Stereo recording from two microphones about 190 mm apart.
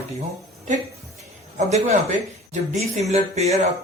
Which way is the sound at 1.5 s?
35° right (ahead or behind).